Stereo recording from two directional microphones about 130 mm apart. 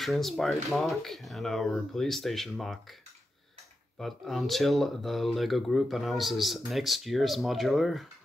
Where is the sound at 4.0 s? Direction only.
Centre (ahead or behind).